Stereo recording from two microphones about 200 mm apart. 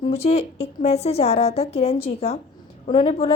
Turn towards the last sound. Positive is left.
turn(degrees=30)  # may be behind; listen again after turning